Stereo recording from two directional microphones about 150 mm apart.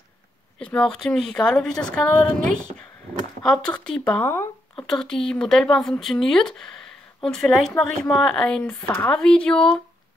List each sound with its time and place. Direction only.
0.6 s speech: 5° left (ahead or behind)
3.4 s speech: 5° left (ahead or behind)
4.8 s speech: 5° left (ahead or behind)